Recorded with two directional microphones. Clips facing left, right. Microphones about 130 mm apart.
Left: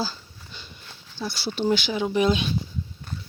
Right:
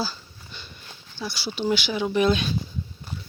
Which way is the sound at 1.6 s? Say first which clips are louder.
Left 1 dB; 25° left (ahead or behind).